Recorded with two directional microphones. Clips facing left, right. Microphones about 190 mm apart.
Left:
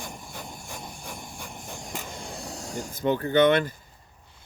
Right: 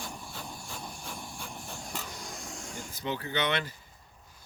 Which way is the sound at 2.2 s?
35° left (ahead or behind).